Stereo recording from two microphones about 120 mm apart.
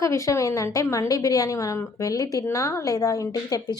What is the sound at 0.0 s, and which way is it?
A woman's voice, 25° left (ahead or behind).